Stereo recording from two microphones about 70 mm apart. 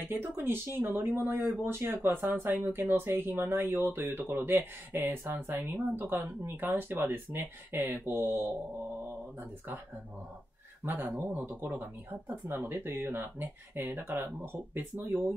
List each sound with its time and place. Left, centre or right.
0.1 s speech: right
10.8 s speech: right